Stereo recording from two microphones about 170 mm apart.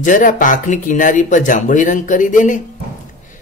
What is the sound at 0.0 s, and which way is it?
Speech, 50° left (ahead or behind).